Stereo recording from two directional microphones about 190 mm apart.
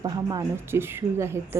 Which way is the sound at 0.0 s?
20° right (ahead or behind).